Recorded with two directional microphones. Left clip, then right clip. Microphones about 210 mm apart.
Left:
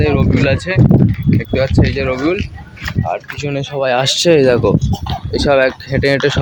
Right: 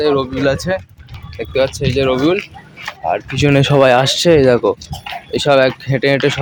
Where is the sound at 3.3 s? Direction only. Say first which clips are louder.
Right 8 dB; 50° right (ahead or behind).